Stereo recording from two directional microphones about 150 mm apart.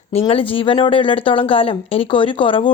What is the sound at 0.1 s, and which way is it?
Speech, 40° left (ahead or behind).